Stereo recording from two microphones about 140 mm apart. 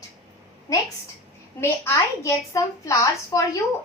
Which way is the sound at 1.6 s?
20° left (ahead or behind).